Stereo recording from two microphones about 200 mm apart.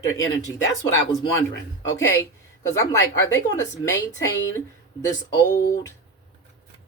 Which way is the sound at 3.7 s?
60° left (ahead or behind).